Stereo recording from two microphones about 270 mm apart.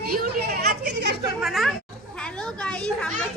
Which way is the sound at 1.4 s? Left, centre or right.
Centre.